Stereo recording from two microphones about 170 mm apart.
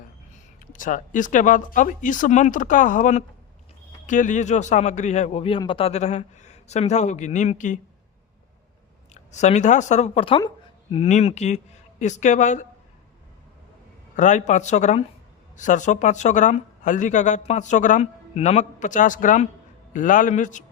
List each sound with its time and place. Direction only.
0.3 s speech: 50° left (ahead or behind)
9.1 s speech: 45° left (ahead or behind)
14.2 s speech: 45° left (ahead or behind)